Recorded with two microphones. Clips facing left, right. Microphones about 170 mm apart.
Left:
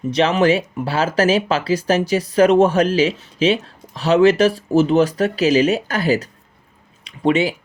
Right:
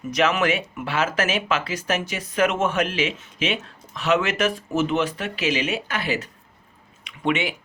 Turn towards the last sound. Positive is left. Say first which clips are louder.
# left 7 dB
turn(degrees=35)  # may be behind; listen again after turning